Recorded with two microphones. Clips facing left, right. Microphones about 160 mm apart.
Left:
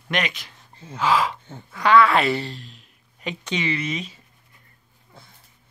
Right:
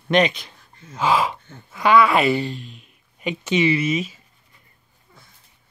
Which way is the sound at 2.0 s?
5° right (ahead or behind).